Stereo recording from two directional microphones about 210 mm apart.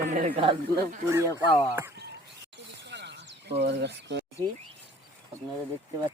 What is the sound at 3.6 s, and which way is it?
Speech, 55° right (ahead or behind).